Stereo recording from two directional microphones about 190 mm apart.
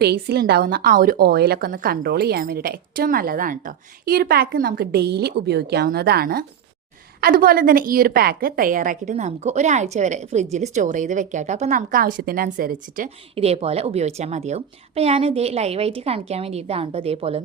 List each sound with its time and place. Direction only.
0.0 s a woman's voice: 55° right (ahead or behind)
13.3 s a woman's voice: 30° right (ahead or behind)